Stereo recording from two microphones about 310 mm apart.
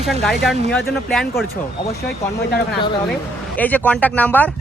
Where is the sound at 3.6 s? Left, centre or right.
Centre.